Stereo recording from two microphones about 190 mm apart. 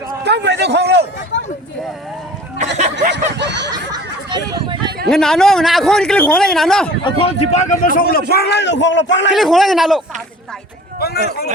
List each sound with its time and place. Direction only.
0.3 s a man's voice: 65° right (ahead or behind)
3.1 s snicker: 65° right (ahead or behind)
3.7 s a sound: 20° right (ahead or behind)
5.0 s speech: 5° left (ahead or behind)
7.0 s a man's voice: 30° left (ahead or behind)
7.7 s a man's voice: 45° left (ahead or behind)
8.3 s a man's voice: 60° left (ahead or behind)
9.3 s speech: centre (ahead or behind)
11.0 s speech: 55° left (ahead or behind)